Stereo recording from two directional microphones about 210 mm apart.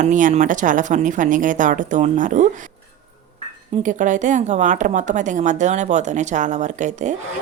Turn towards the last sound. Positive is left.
turn(degrees=-35)  # may be behind; listen again after turning